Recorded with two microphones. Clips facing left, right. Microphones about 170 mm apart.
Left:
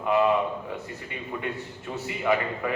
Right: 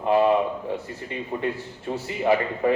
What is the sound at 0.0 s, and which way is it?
A man's voice, 30° right (ahead or behind).